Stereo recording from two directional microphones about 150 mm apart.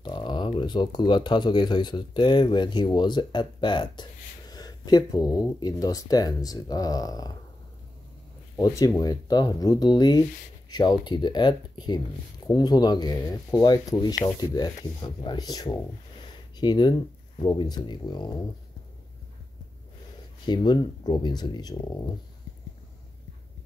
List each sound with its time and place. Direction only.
0.0 s speech: 30° left (ahead or behind)
8.5 s speech: 25° left (ahead or behind)
20.4 s speech: 30° left (ahead or behind)